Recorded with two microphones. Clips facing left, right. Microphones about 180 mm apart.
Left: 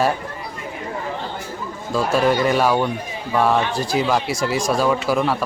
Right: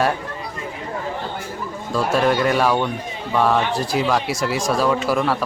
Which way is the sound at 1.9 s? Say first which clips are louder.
Left 1 dB; centre (ahead or behind).